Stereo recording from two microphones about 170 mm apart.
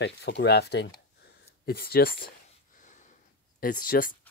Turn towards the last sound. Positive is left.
turn(degrees=55)  # may be behind; listen again after turning